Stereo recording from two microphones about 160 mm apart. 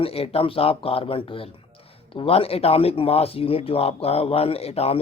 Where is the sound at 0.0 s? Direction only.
35° left (ahead or behind).